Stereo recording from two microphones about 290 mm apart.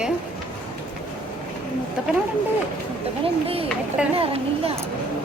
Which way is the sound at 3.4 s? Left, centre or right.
Centre.